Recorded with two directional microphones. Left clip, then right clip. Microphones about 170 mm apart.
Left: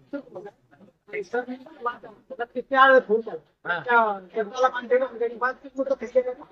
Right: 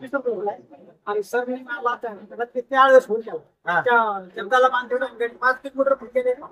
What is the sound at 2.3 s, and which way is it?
Speech, 15° right (ahead or behind).